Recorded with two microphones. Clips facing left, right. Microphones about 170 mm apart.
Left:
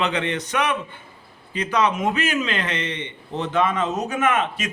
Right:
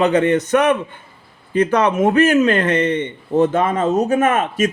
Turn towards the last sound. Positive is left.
turn(degrees=-45)  # may be behind; listen again after turning